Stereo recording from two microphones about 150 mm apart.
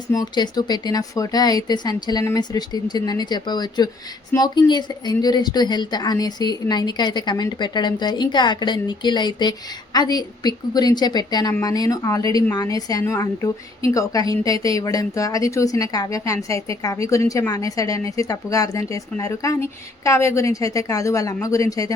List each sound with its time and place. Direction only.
0.1 s a woman's voice: 25° left (ahead or behind)